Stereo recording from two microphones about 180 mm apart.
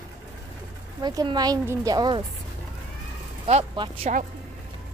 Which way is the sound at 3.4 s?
30° right (ahead or behind).